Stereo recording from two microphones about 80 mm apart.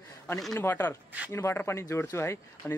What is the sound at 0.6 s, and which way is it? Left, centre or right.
Speech, left.